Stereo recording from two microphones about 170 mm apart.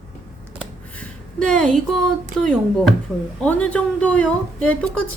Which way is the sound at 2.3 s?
55° right (ahead or behind).